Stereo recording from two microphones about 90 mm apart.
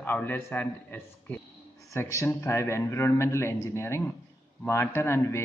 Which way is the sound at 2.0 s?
30° left (ahead or behind).